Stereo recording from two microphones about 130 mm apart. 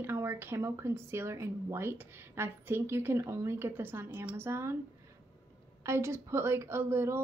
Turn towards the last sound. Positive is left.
turn(degrees=-20)  # may be behind; listen again after turning